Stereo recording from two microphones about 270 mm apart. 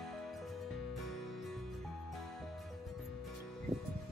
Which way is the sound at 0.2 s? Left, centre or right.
Centre.